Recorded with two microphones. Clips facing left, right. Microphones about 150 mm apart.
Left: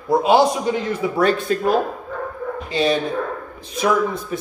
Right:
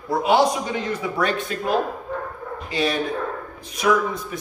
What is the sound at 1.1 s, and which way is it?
Speech, 35° left (ahead or behind).